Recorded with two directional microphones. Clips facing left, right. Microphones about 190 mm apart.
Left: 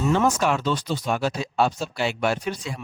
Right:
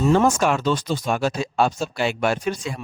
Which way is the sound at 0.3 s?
50° right (ahead or behind).